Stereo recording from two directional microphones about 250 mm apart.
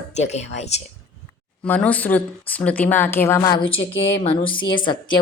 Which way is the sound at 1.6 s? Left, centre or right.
Centre.